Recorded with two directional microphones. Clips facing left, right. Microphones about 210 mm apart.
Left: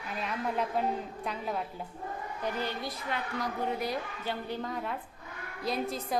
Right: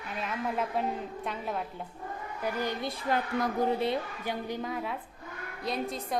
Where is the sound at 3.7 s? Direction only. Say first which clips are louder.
Right 4 dB; 25° right (ahead or behind).